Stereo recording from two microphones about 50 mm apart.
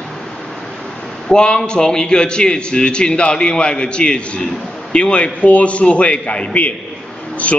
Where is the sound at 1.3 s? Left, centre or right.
Centre.